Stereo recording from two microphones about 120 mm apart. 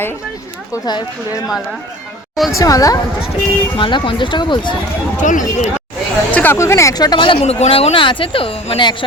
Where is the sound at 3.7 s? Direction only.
45° left (ahead or behind).